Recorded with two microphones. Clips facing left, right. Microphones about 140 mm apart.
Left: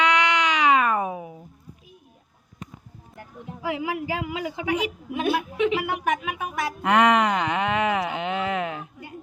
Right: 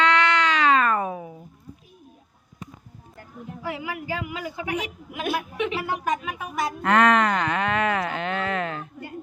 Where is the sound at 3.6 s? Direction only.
90° left.